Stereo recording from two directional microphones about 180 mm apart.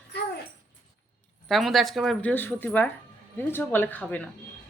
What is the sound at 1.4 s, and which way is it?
Speech, centre (ahead or behind).